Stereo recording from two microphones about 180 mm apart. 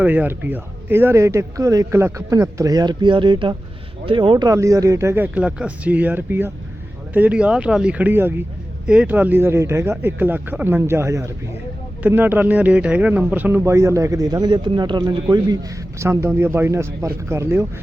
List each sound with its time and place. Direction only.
0.0 s speech: 10° right (ahead or behind)